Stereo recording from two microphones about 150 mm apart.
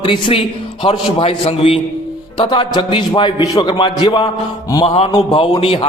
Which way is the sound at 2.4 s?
30° left (ahead or behind).